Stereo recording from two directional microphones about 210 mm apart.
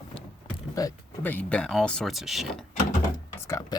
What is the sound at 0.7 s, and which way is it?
Speech, 15° left (ahead or behind).